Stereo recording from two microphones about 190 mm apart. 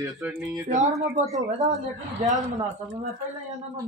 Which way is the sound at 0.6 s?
40° right (ahead or behind).